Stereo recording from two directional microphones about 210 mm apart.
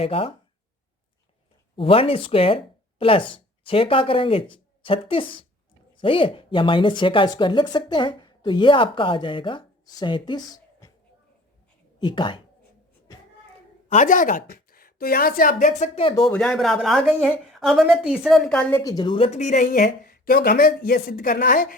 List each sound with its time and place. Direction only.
0.0 s speech: 25° left (ahead or behind)
1.7 s speech: 25° left (ahead or behind)
11.9 s speech: 20° left (ahead or behind)
13.9 s a woman's voice: 40° left (ahead or behind)
16.3 s a woman's voice: 5° left (ahead or behind); by 21.8 s 40° left (ahead or behind)